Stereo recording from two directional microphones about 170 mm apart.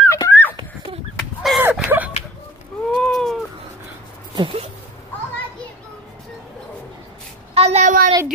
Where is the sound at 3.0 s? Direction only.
Centre (ahead or behind).